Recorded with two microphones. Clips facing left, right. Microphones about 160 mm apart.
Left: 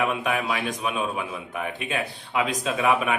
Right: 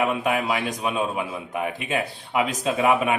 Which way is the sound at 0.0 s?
25° right (ahead or behind).